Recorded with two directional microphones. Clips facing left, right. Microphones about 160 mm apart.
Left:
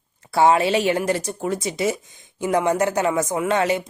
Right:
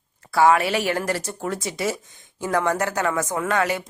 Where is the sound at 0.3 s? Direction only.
25° left (ahead or behind).